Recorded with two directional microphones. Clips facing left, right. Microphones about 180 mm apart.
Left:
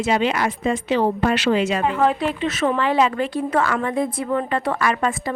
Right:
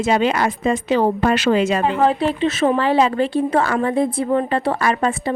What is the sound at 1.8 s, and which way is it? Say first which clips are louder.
Speech: right 2 dB; 30° right (ahead or behind).